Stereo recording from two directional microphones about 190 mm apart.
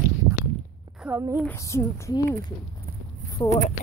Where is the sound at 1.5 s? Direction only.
15° left (ahead or behind).